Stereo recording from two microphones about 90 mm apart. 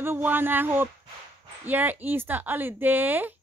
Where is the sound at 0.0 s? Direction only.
25° right (ahead or behind).